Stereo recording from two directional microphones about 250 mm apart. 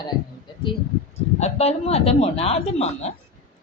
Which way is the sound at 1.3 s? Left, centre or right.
Left.